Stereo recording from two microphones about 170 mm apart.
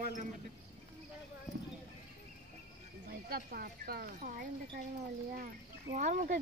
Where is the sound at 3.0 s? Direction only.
65° right (ahead or behind).